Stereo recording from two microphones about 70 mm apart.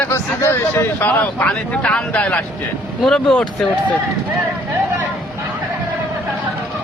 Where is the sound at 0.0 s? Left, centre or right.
Left.